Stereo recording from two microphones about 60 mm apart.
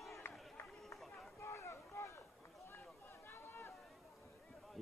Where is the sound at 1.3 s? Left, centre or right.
Left.